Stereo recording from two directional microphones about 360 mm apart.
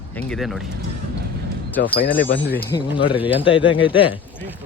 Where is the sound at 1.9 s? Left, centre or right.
Left.